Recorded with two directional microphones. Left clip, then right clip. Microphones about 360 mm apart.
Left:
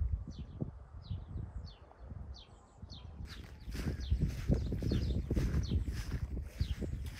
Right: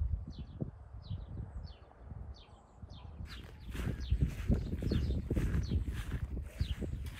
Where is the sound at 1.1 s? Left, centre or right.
Left.